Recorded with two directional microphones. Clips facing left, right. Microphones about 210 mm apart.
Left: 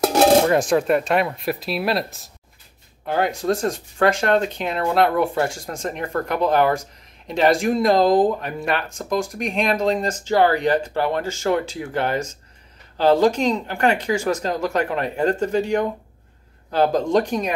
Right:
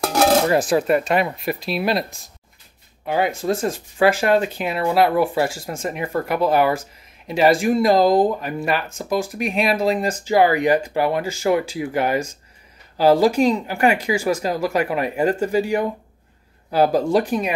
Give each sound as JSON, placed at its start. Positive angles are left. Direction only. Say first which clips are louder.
{"t": 0.0, "sound": "dishes", "louder": "left 2 dB", "side_deg": 25}
{"t": 0.5, "sound": "speech", "louder": "even", "side_deg": -5}